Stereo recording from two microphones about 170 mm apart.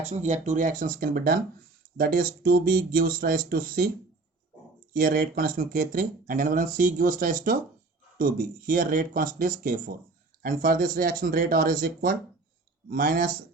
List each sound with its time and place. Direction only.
0.0 s speech: 40° right (ahead or behind); by 3.8 s 60° right (ahead or behind)
4.9 s speech: 60° right (ahead or behind)